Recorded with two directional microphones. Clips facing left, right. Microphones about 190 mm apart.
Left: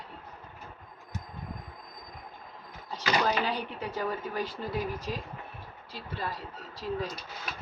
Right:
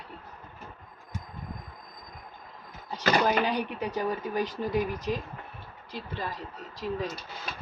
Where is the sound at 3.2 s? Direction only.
15° right (ahead or behind).